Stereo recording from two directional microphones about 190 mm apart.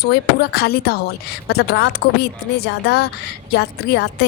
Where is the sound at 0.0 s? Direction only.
55° left (ahead or behind).